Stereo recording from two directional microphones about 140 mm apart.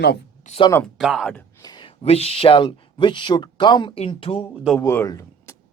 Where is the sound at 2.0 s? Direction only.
45° left (ahead or behind).